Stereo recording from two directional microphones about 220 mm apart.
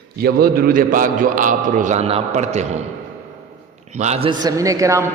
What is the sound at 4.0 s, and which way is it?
A man's voice, 30° right (ahead or behind).